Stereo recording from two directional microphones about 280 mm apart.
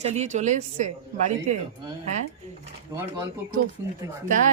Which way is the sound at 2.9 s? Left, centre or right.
Centre.